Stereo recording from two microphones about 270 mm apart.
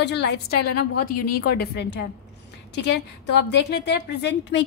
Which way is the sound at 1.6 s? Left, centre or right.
Left.